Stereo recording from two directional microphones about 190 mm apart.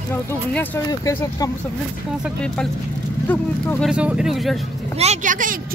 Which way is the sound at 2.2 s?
5° left (ahead or behind).